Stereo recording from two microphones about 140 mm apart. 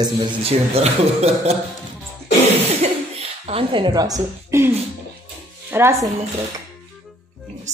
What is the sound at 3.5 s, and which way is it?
A woman's voice, 40° right (ahead or behind).